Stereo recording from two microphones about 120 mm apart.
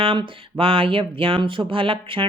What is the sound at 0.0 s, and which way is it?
Speech, 40° right (ahead or behind).